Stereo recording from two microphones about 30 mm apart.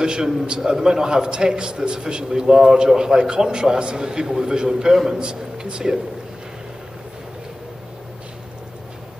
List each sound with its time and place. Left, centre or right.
0.0 s a man's voice: right